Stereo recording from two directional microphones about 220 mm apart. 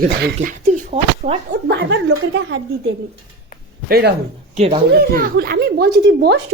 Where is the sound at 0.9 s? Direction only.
30° right (ahead or behind).